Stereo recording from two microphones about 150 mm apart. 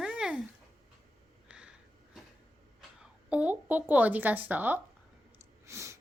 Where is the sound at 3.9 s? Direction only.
10° right (ahead or behind).